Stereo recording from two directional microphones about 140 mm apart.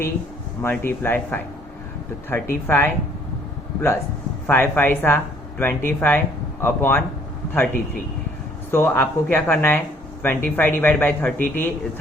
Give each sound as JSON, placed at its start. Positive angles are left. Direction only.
{"t": 0.6, "sound": "a man's voice", "side_deg": 15}
{"t": 4.4, "sound": "a man's voice", "side_deg": 15}